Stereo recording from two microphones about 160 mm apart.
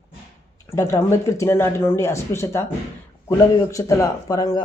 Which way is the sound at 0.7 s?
15° left (ahead or behind).